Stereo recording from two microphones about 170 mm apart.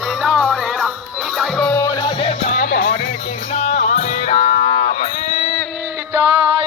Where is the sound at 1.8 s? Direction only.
20° left (ahead or behind).